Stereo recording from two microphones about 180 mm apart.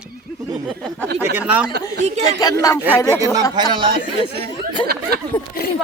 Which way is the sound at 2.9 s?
15° left (ahead or behind).